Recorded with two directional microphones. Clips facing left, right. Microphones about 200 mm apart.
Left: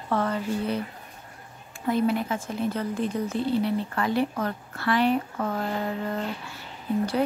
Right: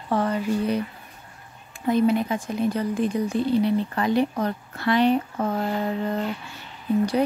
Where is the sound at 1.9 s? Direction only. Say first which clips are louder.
Right 4 dB; 20° right (ahead or behind).